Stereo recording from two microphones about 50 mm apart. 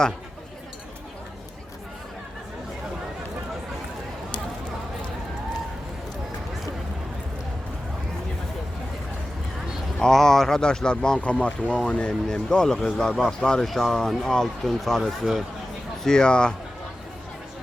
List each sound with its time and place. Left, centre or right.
10.0 s speech: centre
11.2 s speech: left
13.7 s speech: centre
16.0 s speech: centre